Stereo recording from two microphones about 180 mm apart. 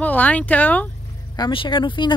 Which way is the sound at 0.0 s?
10° left (ahead or behind).